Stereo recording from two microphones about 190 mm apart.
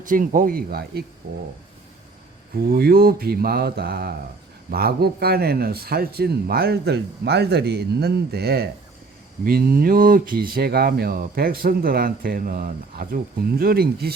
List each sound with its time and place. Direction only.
0.0 s speech: 45° right (ahead or behind)
2.6 s a man's voice: 50° right (ahead or behind)